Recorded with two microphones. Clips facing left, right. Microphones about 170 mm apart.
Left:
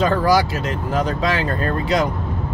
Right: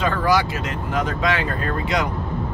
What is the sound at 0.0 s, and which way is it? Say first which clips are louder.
Speech: left 3 dB; 35° left (ahead or behind).